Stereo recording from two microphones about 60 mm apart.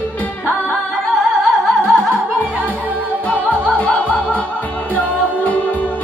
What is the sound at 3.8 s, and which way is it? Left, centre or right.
Music, left.